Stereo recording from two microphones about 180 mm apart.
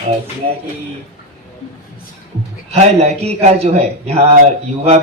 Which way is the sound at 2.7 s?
35° right (ahead or behind).